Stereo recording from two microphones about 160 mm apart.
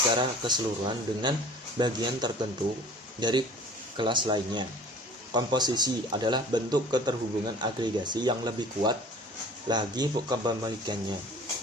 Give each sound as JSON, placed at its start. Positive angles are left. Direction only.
{"t": 0.2, "sound": "speech", "side_deg": -30}